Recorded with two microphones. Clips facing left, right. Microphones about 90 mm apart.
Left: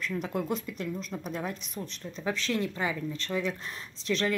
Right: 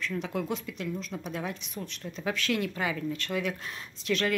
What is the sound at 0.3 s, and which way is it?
Speech, centre (ahead or behind).